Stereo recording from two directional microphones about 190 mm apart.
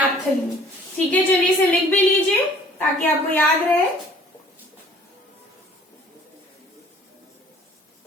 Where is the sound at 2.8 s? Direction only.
10° left (ahead or behind).